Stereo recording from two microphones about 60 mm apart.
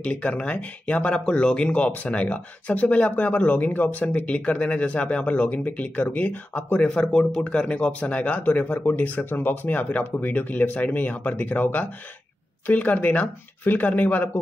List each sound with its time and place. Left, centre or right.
0.0 s speech: left
6.9 s speech: centre